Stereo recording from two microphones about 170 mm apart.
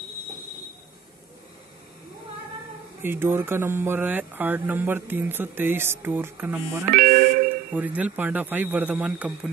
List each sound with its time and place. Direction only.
3.0 s speech: 15° right (ahead or behind)
6.9 s music: 55° right (ahead or behind)
7.7 s speech: 10° right (ahead or behind)